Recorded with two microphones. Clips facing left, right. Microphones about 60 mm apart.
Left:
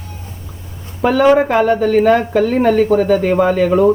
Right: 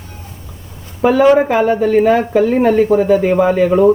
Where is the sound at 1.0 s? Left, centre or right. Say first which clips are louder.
Right 1 dB; centre.